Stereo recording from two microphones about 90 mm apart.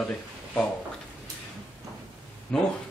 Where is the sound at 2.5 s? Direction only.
10° left (ahead or behind).